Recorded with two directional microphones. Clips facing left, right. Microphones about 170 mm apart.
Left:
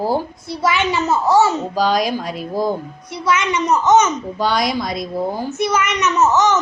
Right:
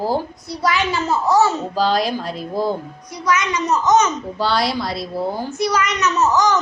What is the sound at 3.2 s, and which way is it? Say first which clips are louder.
A child's voice: left 2 dB; 25° left (ahead or behind).